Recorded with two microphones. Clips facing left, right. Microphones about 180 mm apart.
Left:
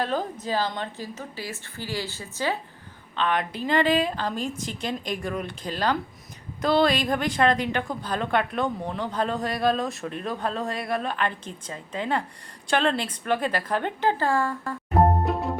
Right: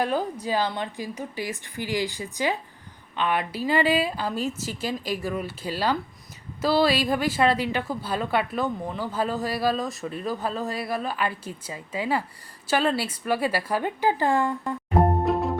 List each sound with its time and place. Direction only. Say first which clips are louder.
0.0 s a woman's voice: right 2 dB; 10° right (ahead or behind)
14.8 s music: even; centre (ahead or behind)